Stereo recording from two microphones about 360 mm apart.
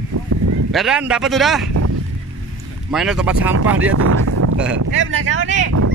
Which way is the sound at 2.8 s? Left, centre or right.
Centre.